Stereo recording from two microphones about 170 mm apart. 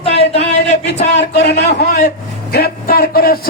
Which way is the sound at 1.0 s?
80° left.